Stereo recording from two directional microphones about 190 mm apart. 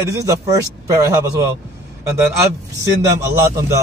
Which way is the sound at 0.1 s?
15° right (ahead or behind).